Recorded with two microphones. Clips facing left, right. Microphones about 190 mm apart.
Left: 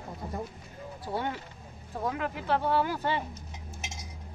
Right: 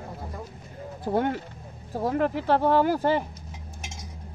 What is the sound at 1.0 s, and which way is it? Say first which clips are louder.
Speech: right 8 dB; 50° right (ahead or behind).